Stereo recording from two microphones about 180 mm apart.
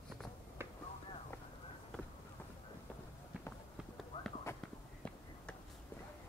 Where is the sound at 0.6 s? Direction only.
15° right (ahead or behind).